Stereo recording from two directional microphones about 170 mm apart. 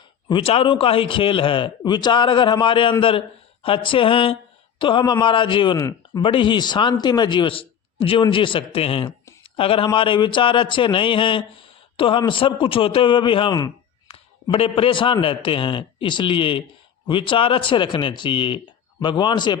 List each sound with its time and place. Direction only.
0.3 s a man's voice: 30° left (ahead or behind)